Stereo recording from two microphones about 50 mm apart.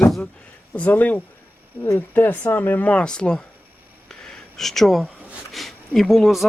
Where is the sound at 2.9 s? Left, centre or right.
Centre.